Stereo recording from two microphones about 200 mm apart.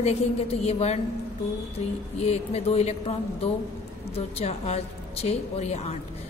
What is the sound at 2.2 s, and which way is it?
A woman's voice, 30° left (ahead or behind).